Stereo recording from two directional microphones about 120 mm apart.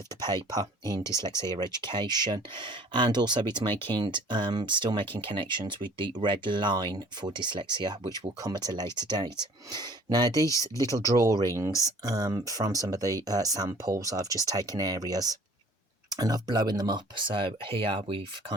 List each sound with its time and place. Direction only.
0.5 s speech: 35° right (ahead or behind)